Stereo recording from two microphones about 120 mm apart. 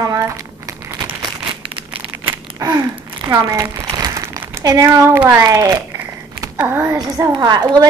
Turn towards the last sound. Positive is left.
turn(degrees=-35)  # may be behind; listen again after turning